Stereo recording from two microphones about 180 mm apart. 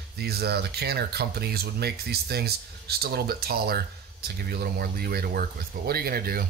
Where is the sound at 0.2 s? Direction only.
60° right (ahead or behind).